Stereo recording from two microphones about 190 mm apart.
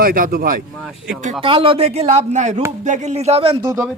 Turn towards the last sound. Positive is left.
turn(degrees=-30)  # may be behind; listen again after turning